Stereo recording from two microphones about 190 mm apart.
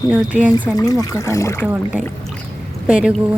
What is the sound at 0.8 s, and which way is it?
Speech, 20° left (ahead or behind).